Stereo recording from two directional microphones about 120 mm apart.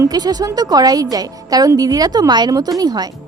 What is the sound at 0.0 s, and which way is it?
A woman's voice, 35° right (ahead or behind).